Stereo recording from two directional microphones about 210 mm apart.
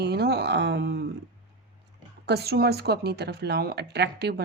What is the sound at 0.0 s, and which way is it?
Speech, 50° right (ahead or behind).